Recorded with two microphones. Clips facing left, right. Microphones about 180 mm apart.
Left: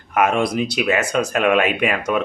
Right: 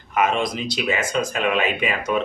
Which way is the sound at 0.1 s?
55° left (ahead or behind).